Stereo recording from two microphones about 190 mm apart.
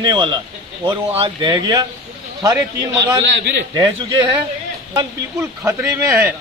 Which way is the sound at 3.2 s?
65° right (ahead or behind).